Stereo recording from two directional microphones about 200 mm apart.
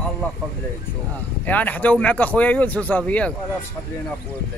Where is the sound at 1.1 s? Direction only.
10° left (ahead or behind).